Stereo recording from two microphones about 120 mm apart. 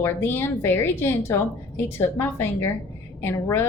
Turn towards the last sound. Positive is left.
turn(degrees=20)  # may be behind; listen again after turning